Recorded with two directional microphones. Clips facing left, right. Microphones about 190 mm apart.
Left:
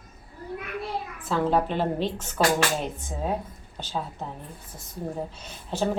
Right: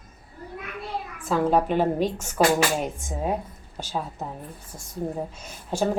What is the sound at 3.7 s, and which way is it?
Speech, 10° right (ahead or behind).